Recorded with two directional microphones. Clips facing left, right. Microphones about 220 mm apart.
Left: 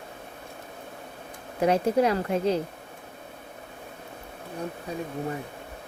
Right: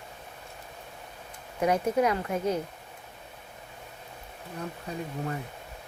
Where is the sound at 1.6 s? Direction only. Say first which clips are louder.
Left 3 dB; 30° left (ahead or behind).